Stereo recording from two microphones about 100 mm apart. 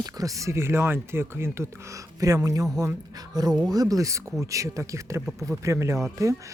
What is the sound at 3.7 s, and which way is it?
Speech, 35° right (ahead or behind).